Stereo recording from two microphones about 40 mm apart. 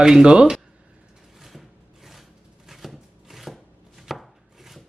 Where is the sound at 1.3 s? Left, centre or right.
Centre.